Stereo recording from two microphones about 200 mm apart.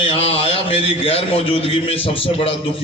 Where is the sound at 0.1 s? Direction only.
30° left (ahead or behind).